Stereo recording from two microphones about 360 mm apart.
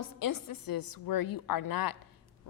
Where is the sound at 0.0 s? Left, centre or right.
Left.